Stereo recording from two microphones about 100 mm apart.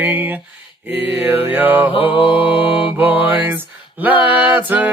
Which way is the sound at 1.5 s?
20° right (ahead or behind).